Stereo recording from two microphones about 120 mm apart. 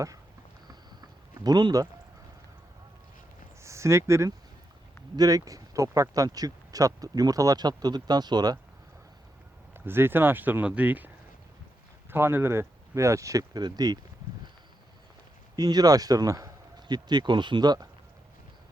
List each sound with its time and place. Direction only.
0.7 s a sound: 35° right (ahead or behind)
3.6 s speech: 25° right (ahead or behind)
9.7 s speech: 20° right (ahead or behind)
12.1 s speech: 20° right (ahead or behind); by 14.0 s 35° right (ahead or behind)
15.5 s speech: 35° right (ahead or behind)